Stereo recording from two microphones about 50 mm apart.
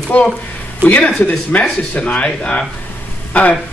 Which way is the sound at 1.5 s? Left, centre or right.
Left.